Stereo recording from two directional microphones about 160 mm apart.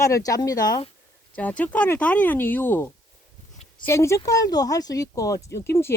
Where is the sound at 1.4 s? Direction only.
10° left (ahead or behind).